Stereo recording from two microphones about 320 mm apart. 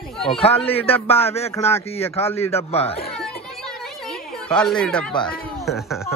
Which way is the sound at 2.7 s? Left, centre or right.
Centre.